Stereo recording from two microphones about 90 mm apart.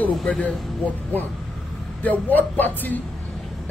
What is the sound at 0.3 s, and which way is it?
Speech, 15° left (ahead or behind).